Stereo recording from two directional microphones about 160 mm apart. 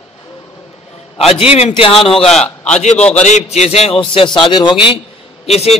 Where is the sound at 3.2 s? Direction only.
45° left (ahead or behind).